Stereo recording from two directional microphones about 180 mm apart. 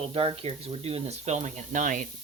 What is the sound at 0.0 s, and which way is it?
Speech, 30° right (ahead or behind).